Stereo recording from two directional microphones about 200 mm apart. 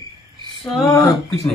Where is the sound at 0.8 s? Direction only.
15° left (ahead or behind).